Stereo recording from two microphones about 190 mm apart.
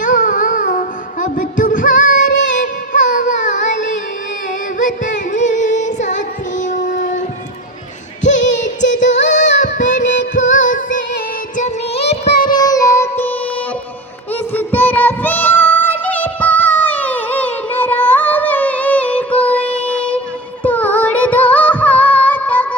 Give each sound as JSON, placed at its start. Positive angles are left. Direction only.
{"t": 0.0, "sound": "music", "side_deg": 45}
{"t": 2.3, "sound": "music", "side_deg": 75}
{"t": 2.6, "sound": "music", "side_deg": 40}
{"t": 4.8, "sound": "carnatic music", "side_deg": 45}
{"t": 5.3, "sound": "female singing", "side_deg": 40}
{"t": 6.6, "sound": "child singing", "side_deg": 40}
{"t": 8.4, "sound": "music", "side_deg": 70}
{"t": 9.7, "sound": "carnatic music", "side_deg": 40}
{"t": 10.1, "sound": "music", "side_deg": 80}
{"t": 10.5, "sound": "music", "side_deg": 45}
{"t": 11.5, "sound": "child singing", "side_deg": 35}
{"t": 12.5, "sound": "music", "side_deg": 20}
{"t": 14.3, "sound": "child singing", "side_deg": 10}
{"t": 20.7, "sound": "music", "side_deg": 10}